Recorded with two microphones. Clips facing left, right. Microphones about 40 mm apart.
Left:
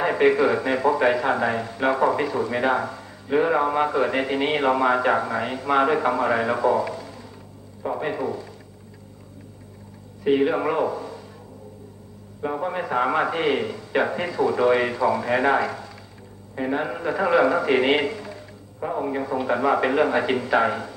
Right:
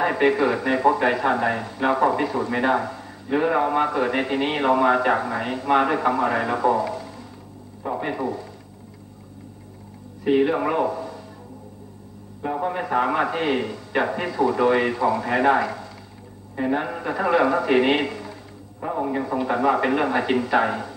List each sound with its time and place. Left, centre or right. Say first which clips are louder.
0.0 s a man's voice: left 1 dB; centre
10.2 s a man's voice: even; centre
12.4 s a man's voice: right 1 dB; centre